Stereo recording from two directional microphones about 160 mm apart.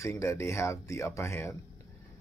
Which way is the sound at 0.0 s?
20° left (ahead or behind).